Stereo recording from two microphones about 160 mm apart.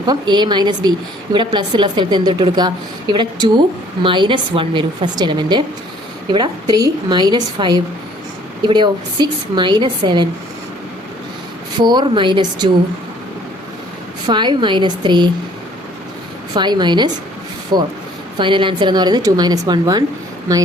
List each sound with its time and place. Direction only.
0.0 s a woman's voice: 25° right (ahead or behind)
11.9 s a woman's voice: 30° right (ahead or behind)
14.3 s a woman's voice: 30° right (ahead or behind)
16.6 s a woman's voice: 30° right (ahead or behind)